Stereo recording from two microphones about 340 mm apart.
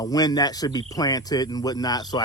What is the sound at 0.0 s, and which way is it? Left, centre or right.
Speech, centre.